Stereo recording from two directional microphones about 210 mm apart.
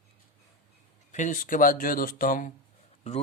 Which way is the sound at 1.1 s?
35° left (ahead or behind).